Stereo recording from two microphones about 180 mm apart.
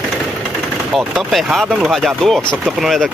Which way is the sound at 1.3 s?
Centre (ahead or behind).